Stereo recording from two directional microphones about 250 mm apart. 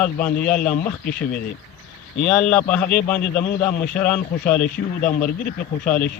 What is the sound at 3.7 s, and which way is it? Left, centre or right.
Speech, left.